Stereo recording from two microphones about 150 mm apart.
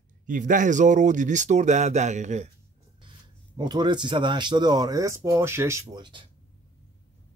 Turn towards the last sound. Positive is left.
turn(degrees=-30)  # may be behind; listen again after turning